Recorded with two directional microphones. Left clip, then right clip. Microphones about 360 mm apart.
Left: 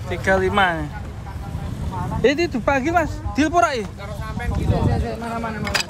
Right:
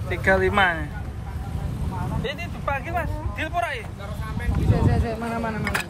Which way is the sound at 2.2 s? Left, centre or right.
Left.